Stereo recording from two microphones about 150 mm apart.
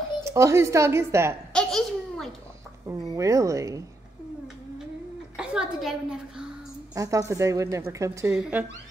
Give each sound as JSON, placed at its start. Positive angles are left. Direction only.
{"t": 0.2, "sound": "a woman's voice", "side_deg": -20}
{"t": 1.5, "sound": "a sound", "side_deg": 5}
{"t": 2.9, "sound": "a woman's voice", "side_deg": -20}
{"t": 5.4, "sound": "a woman's voice", "side_deg": -5}
{"t": 7.0, "sound": "a woman's voice", "side_deg": -20}